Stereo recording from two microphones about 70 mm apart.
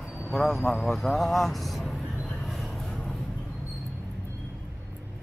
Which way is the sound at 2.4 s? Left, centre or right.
Centre.